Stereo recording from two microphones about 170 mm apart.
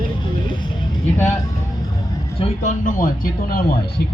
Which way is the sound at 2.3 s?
45° left (ahead or behind).